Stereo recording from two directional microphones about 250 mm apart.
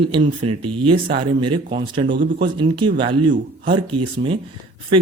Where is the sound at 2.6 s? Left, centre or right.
Centre.